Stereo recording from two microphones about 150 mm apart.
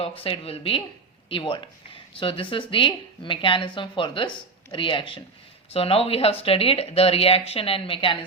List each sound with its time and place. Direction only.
0.2 s speech: 40° left (ahead or behind)